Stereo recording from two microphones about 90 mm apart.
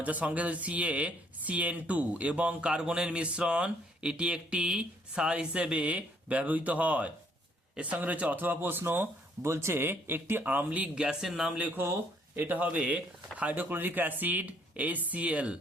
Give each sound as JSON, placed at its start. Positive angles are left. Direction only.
{"t": 0.0, "sound": "speech", "side_deg": -15}
{"t": 11.5, "sound": "speech", "side_deg": -20}